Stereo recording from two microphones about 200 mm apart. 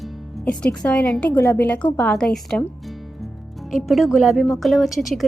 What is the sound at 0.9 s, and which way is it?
A woman's voice, 5° left (ahead or behind).